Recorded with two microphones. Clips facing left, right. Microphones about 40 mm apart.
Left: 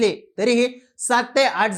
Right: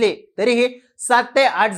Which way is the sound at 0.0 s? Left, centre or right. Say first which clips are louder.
Right 2 dB; right.